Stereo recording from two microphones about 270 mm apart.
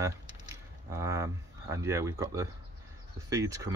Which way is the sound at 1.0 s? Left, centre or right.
Centre.